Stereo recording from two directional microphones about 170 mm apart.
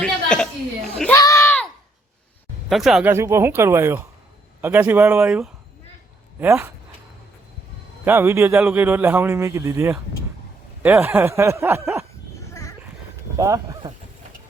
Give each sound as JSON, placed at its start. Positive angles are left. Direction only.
{"t": 0.0, "sound": "a sound", "side_deg": 5}
{"t": 1.1, "sound": "a sound", "side_deg": 15}
{"t": 2.6, "sound": "speech", "side_deg": 0}
{"t": 3.1, "sound": "a man's voice", "side_deg": -15}
{"t": 8.0, "sound": "a man's voice", "side_deg": -15}
{"t": 13.3, "sound": "speech", "side_deg": -20}